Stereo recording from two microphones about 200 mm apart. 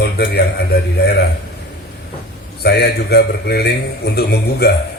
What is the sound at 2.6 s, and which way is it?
A man's voice, 55° left (ahead or behind).